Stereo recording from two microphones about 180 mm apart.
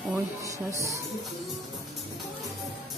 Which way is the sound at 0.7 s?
15° right (ahead or behind).